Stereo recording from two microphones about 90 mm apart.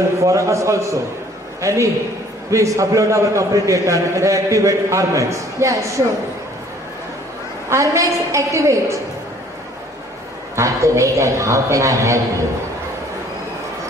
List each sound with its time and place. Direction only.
0.2 s a man's voice: 35° right (ahead or behind)
7.7 s a man's voice: 35° right (ahead or behind)
10.5 s a man's voice: 35° right (ahead or behind)